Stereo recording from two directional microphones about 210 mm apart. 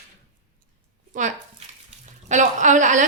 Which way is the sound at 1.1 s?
35° right (ahead or behind).